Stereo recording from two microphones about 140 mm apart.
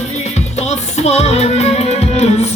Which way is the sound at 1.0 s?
50° left (ahead or behind).